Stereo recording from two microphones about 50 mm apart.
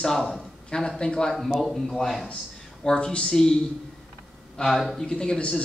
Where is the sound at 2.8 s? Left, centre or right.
Centre.